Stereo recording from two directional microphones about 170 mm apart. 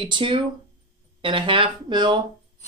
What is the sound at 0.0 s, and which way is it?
Speech, 30° right (ahead or behind).